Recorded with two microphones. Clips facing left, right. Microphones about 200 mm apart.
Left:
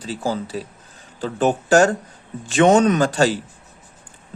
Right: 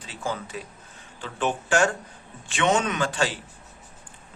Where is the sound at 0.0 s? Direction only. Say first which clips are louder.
Left 7 dB; 35° left (ahead or behind).